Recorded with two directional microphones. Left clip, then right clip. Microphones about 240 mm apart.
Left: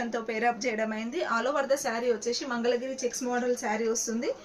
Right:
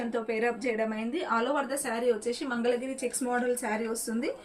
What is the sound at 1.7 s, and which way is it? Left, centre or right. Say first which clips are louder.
Speech: left 2 dB; centre.